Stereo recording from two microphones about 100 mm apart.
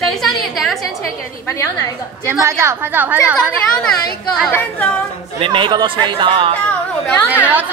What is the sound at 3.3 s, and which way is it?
Speech, 5° left (ahead or behind).